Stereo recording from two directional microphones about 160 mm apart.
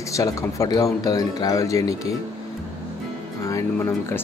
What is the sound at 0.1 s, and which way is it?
Speech, 20° left (ahead or behind).